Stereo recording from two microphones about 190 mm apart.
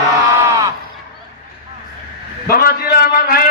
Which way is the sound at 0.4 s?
15° right (ahead or behind).